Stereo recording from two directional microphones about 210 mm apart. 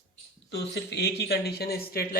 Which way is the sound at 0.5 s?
55° left (ahead or behind).